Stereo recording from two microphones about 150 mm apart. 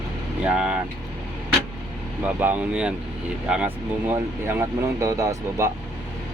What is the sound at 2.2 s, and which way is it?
Speech, 10° right (ahead or behind).